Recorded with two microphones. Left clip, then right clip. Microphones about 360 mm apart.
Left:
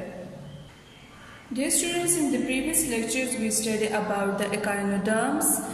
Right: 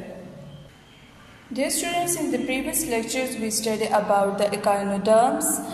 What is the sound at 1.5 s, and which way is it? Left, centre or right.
A woman's voice, centre.